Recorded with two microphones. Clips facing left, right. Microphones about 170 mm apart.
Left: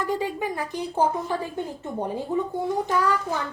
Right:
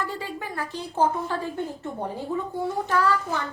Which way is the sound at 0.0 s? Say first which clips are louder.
Left 5 dB; 15° left (ahead or behind).